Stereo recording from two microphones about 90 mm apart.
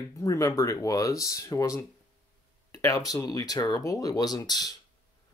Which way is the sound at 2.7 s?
40° left (ahead or behind).